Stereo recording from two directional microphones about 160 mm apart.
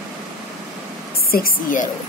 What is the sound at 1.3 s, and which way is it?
Speech, 60° left (ahead or behind).